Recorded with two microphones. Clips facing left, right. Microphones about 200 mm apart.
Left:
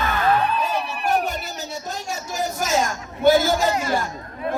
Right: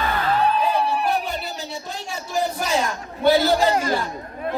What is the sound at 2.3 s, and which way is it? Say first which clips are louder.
Speech: right 1 dB; 45° left (ahead or behind).